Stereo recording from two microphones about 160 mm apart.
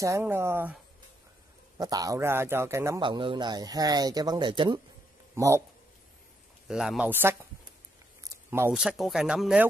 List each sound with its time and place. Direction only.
0.0 s a man's voice: 15° right (ahead or behind)
1.8 s a man's voice: 20° right (ahead or behind)
3.0 s speech: 30° right (ahead or behind)
5.3 s speech: 15° right (ahead or behind)
6.7 s a man's voice: 5° right (ahead or behind)
8.2 s a sound: 15° right (ahead or behind)
8.7 s speech: centre (ahead or behind)